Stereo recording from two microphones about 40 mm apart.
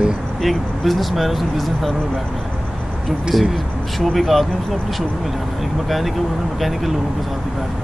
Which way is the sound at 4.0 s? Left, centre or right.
Centre.